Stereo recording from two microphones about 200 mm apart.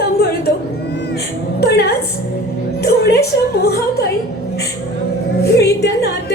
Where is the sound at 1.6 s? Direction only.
55° left (ahead or behind).